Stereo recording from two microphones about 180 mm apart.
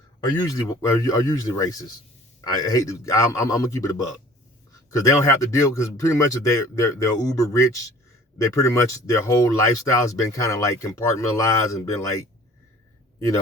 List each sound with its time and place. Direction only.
0.2 s speech: 20° left (ahead or behind)